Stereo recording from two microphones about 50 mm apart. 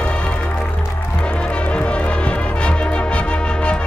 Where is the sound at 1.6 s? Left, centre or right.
Left.